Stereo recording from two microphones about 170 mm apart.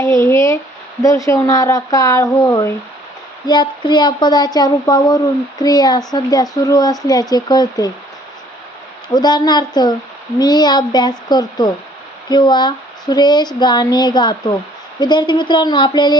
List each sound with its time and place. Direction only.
0.0 s speech: 15° left (ahead or behind)
9.1 s speech: 25° left (ahead or behind)